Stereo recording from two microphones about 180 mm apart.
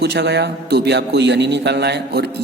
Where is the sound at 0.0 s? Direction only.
65° right (ahead or behind).